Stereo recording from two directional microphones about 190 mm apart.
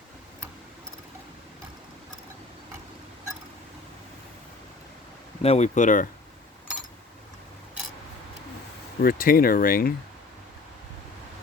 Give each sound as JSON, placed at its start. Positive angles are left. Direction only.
{"t": 5.4, "sound": "speech", "side_deg": 35}
{"t": 9.0, "sound": "speech", "side_deg": 50}